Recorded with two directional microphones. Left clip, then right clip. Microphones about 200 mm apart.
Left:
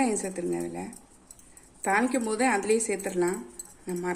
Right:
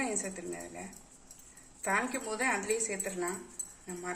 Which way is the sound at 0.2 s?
60° left (ahead or behind).